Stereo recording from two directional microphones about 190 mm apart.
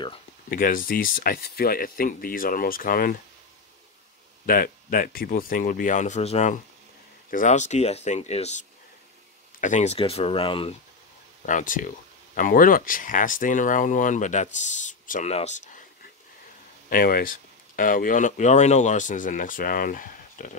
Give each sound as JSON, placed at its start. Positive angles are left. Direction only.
{"t": 0.5, "sound": "speech", "side_deg": 45}
{"t": 4.5, "sound": "speech", "side_deg": 50}
{"t": 11.4, "sound": "speech", "side_deg": 45}
{"t": 16.9, "sound": "speech", "side_deg": 50}